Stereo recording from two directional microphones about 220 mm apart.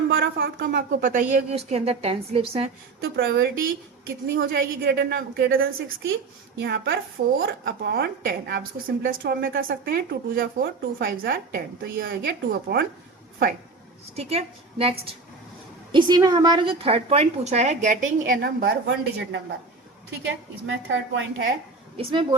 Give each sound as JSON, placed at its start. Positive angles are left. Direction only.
{"t": 0.1, "sound": "speech", "side_deg": -50}
{"t": 3.0, "sound": "speech", "side_deg": -50}
{"t": 14.2, "sound": "a woman's voice", "side_deg": -30}
{"t": 21.9, "sound": "a woman's voice", "side_deg": -25}